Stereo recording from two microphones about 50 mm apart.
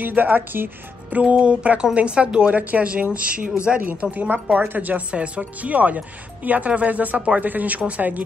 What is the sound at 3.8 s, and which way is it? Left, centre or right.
Speech, right.